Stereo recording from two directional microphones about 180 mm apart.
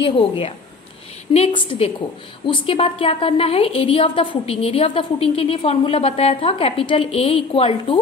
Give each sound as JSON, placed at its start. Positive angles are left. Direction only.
{"t": 1.3, "sound": "a woman's voice", "side_deg": 30}